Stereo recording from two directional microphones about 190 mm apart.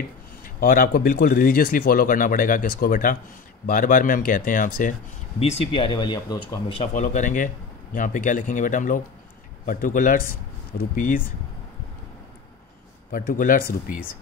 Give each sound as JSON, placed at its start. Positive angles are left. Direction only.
{"t": 0.4, "sound": "speech", "side_deg": 45}
{"t": 5.4, "sound": "speech", "side_deg": 30}
{"t": 13.1, "sound": "speech", "side_deg": 45}